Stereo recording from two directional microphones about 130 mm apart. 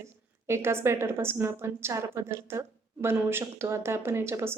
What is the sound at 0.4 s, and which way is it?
Speech, 20° right (ahead or behind).